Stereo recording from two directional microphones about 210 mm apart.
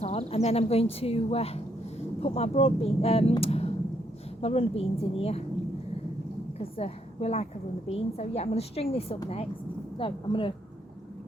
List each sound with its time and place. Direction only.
0.0 s speech: 30° left (ahead or behind)
6.6 s a woman's voice: 30° left (ahead or behind)